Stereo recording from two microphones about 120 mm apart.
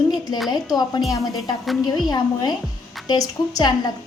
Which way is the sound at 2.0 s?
35° left (ahead or behind).